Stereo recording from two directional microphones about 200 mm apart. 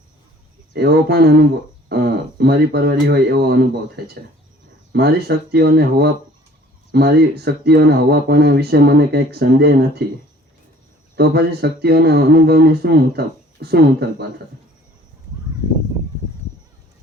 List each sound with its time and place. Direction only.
0.7 s speech: 55° right (ahead or behind)
11.2 s speech: 55° right (ahead or behind)